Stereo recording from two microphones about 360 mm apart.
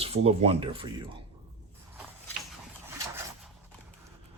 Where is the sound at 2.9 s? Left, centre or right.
Centre.